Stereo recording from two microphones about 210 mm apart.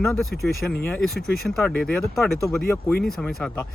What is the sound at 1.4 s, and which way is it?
A man's voice, centre (ahead or behind).